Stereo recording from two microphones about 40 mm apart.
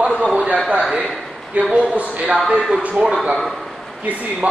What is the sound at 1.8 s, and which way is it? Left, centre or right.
Speech, right.